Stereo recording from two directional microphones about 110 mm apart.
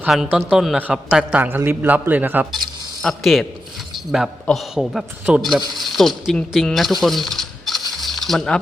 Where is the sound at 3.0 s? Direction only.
Centre (ahead or behind).